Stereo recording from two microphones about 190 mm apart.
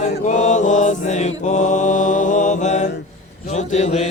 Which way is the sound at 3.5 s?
40° left (ahead or behind).